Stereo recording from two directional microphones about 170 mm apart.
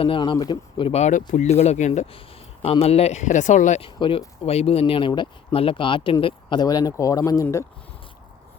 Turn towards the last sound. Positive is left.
turn(degrees=15)  # may be behind; listen again after turning